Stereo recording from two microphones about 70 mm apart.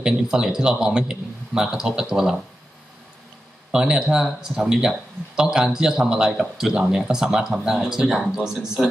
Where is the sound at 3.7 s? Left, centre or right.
Centre.